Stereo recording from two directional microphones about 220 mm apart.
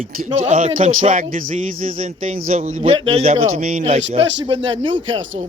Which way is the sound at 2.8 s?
25° right (ahead or behind).